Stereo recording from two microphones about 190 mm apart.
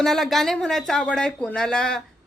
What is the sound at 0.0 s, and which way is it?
Speech, centre (ahead or behind).